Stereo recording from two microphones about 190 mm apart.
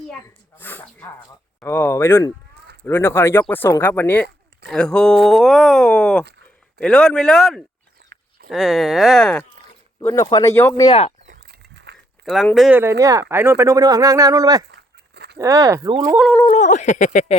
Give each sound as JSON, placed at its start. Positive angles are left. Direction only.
{"t": 0.1, "sound": "speech", "side_deg": 10}
{"t": 10.0, "sound": "speech", "side_deg": 15}
{"t": 11.3, "sound": "a sound", "side_deg": -55}
{"t": 12.2, "sound": "speech", "side_deg": 0}
{"t": 14.7, "sound": "a sound", "side_deg": -60}
{"t": 15.4, "sound": "speech", "side_deg": -20}
{"t": 16.5, "sound": "speech", "side_deg": 40}